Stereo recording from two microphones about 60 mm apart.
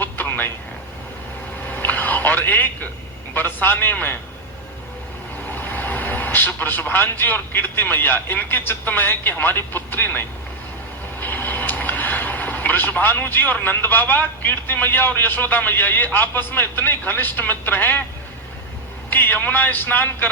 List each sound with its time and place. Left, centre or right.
0.0 s a sound: left
1.7 s telephone: left
3.3 s a man's voice: left
5.5 s a man's voice: left
19.1 s a man's voice: left